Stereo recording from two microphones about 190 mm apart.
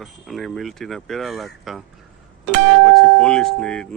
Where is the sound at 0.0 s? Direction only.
Centre (ahead or behind).